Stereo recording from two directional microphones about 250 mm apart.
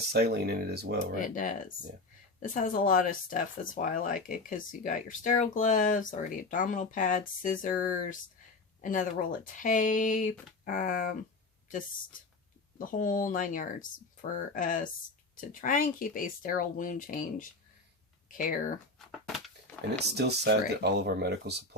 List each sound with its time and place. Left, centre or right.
0.1 s speech: right
1.2 s speech: left
12.8 s speech: left
20.0 s speech: right